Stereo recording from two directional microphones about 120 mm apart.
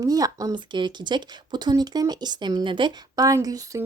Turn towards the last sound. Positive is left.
turn(degrees=-30)  # may be behind; listen again after turning